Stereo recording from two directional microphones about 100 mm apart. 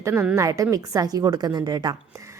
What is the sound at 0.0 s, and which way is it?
A woman's voice, 25° right (ahead or behind).